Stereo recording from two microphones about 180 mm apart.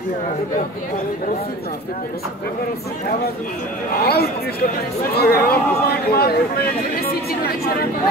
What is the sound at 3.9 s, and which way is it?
Speech, 60° left (ahead or behind).